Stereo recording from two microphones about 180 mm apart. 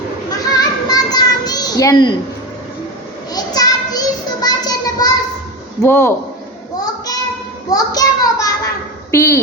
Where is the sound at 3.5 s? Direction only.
20° left (ahead or behind).